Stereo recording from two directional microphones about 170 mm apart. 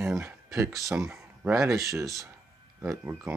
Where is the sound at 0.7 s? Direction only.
Centre (ahead or behind).